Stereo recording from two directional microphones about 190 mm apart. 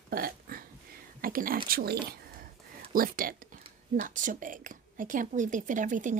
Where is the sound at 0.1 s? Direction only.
50° right (ahead or behind).